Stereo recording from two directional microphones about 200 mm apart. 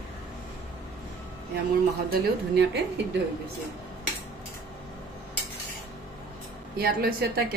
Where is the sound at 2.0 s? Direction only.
50° right (ahead or behind).